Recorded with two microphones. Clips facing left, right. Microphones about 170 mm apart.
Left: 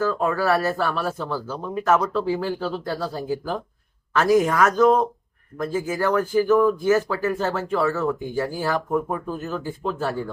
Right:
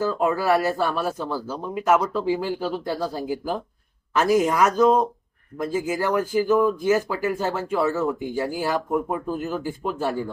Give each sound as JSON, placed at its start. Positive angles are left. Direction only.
{"t": 0.0, "sound": "speech", "side_deg": -15}